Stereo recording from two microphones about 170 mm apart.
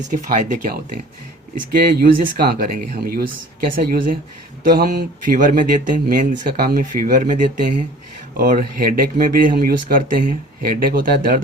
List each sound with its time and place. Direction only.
0.1 s speech: 50° right (ahead or behind)